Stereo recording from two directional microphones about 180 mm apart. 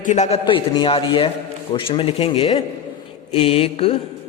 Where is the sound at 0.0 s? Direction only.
40° left (ahead or behind).